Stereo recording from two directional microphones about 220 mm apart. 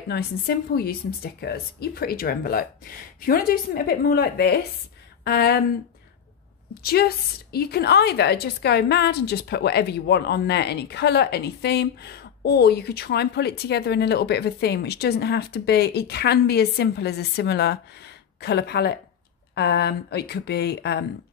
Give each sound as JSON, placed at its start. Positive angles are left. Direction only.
{"t": 0.1, "sound": "a woman's voice", "side_deg": 45}
{"t": 6.7, "sound": "a woman's voice", "side_deg": 45}